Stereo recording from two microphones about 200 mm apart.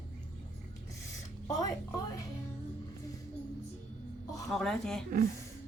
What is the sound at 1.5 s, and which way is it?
Music, 15° left (ahead or behind).